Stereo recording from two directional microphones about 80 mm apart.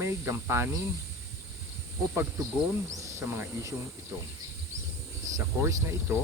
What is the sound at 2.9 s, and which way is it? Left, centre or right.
Snake, right.